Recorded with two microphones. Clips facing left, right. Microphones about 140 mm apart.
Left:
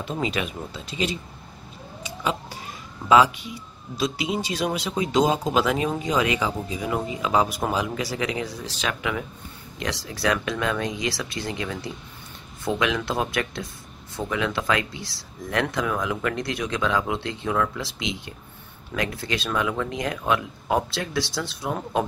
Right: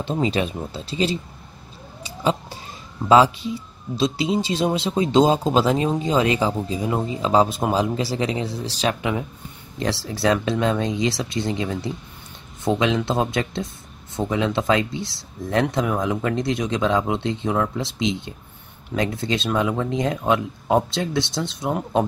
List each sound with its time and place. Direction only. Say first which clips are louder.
0.0 s speech: right 5 dB; 30° right (ahead or behind)
2.0 s police car: right 5 dB; 30° right (ahead or behind)
3.1 s speech: right 3 dB; 30° right (ahead or behind)